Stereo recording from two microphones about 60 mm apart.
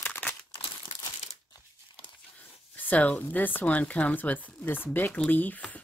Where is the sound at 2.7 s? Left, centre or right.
Left.